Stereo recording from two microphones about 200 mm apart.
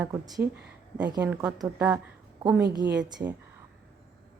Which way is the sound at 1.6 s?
20° right (ahead or behind).